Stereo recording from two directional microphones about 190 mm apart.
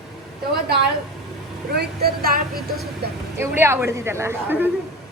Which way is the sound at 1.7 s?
55° right (ahead or behind).